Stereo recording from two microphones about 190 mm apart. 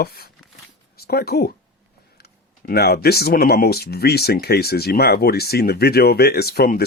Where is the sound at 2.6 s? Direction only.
55° left (ahead or behind).